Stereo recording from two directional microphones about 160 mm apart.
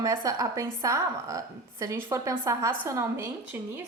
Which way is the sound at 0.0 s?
20° right (ahead or behind).